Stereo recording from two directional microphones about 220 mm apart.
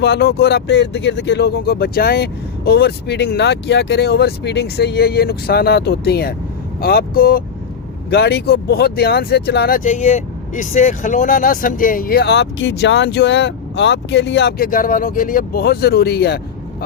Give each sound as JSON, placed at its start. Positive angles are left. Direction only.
{"t": 0.0, "sound": "speech", "side_deg": 50}